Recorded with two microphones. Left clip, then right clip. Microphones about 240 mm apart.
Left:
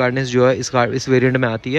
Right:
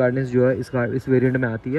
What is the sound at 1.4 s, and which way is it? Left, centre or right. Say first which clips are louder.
Speech: left 5 dB; right.